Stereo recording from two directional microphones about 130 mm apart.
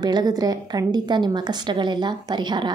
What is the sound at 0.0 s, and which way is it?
A woman's voice, 30° right (ahead or behind).